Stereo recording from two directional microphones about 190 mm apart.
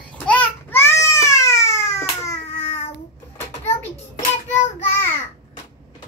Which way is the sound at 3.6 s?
35° left (ahead or behind).